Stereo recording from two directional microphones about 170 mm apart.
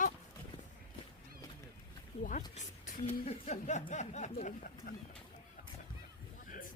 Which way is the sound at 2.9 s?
40° left (ahead or behind).